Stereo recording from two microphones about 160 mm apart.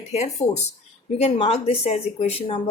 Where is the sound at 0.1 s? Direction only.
45° left (ahead or behind).